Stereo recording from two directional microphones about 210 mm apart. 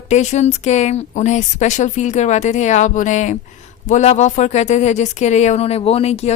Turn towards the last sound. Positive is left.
turn(degrees=30)  # may be behind; listen again after turning